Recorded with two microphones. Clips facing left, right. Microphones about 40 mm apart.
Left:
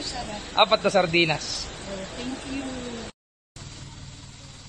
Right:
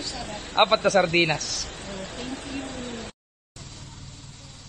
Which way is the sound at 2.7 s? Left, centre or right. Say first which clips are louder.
Even; right.